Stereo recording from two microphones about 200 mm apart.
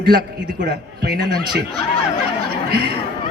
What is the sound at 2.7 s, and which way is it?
Speech, 50° right (ahead or behind).